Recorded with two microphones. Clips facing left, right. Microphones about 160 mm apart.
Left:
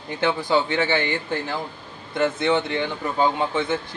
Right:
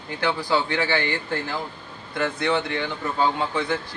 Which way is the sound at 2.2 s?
20° left (ahead or behind).